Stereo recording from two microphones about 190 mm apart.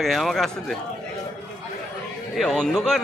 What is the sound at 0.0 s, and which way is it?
Speech, centre (ahead or behind).